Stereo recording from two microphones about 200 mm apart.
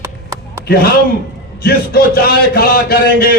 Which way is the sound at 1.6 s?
50° left (ahead or behind).